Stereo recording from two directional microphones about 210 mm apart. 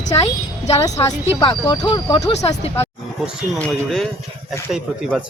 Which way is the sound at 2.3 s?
30° left (ahead or behind).